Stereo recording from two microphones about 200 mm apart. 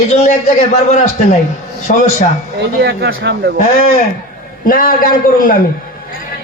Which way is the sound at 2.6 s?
60° right (ahead or behind).